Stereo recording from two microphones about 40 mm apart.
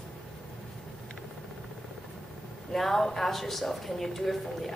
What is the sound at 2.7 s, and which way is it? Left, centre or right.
A woman's voice, centre.